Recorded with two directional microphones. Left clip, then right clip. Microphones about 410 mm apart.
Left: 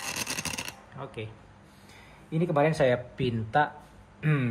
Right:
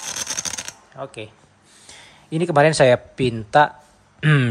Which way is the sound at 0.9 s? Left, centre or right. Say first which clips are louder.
Right 9 dB; centre.